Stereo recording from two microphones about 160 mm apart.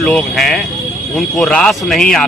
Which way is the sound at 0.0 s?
5° left (ahead or behind).